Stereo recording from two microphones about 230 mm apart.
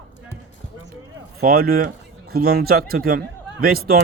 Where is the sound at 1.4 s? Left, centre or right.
Right.